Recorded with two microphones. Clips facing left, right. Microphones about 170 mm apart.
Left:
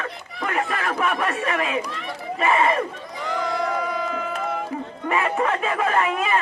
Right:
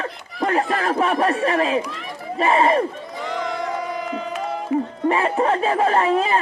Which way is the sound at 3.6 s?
20° right (ahead or behind).